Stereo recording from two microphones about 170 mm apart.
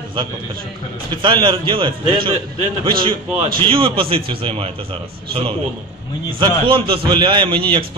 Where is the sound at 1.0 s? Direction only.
30° right (ahead or behind).